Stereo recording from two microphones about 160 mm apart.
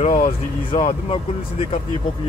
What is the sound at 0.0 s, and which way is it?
Speech, 45° left (ahead or behind).